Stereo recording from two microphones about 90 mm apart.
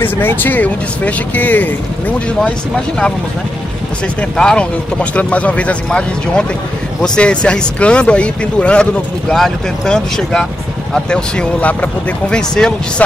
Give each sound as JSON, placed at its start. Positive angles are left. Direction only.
{"t": 0.0, "sound": "speech", "side_deg": 20}
{"t": 4.2, "sound": "speech", "side_deg": 10}